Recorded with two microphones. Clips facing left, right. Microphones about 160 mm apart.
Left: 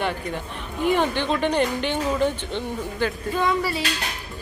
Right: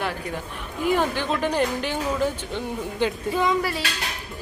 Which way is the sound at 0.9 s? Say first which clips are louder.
Left 1 dB; 5° right (ahead or behind).